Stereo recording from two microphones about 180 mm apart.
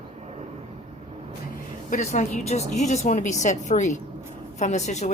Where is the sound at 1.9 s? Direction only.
40° left (ahead or behind).